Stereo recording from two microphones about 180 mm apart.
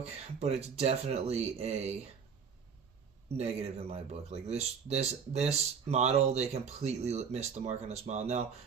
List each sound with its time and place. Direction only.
0.3 s speech: 35° right (ahead or behind)
3.3 s speech: 35° right (ahead or behind)